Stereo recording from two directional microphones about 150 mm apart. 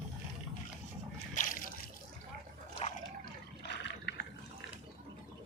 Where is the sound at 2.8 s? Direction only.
45° left (ahead or behind).